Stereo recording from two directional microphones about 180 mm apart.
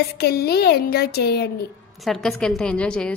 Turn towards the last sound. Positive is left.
turn(degrees=5)  # may be behind; listen again after turning